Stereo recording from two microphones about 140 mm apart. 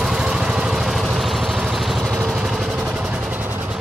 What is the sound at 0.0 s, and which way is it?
Vehicle, 5° right (ahead or behind).